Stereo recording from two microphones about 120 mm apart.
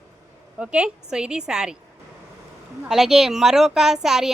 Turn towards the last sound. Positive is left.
turn(degrees=-5)  # may be behind; listen again after turning